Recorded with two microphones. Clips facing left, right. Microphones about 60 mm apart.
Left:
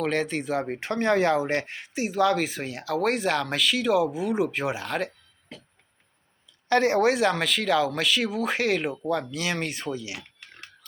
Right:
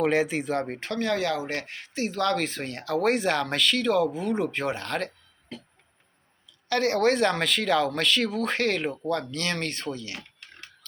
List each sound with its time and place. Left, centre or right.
0.0 s speech: centre
0.8 s speech: left; by 5.5 s centre
6.7 s speech: left
7.0 s speech: centre